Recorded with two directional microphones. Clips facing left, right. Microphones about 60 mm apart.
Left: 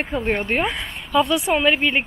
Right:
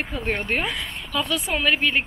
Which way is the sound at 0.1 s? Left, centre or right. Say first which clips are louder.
Left 4 dB; centre.